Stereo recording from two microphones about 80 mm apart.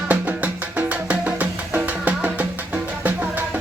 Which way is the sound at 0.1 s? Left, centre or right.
Centre.